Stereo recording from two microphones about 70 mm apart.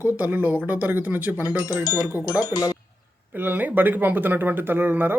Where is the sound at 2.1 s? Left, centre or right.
Left.